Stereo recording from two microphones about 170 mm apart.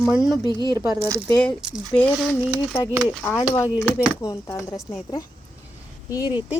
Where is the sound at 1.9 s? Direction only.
10° left (ahead or behind).